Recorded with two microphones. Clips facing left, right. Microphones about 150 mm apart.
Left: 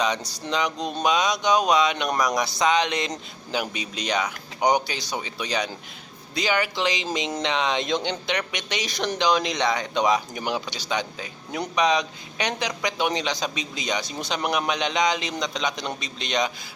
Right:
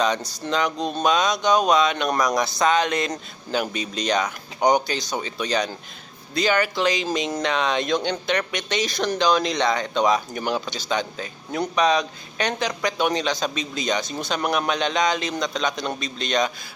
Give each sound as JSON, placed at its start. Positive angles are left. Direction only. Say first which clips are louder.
{"t": 0.2, "sound": "speech", "louder": "right 2 dB", "side_deg": -45}
{"t": 0.4, "sound": "speech", "louder": "right 2 dB", "side_deg": 15}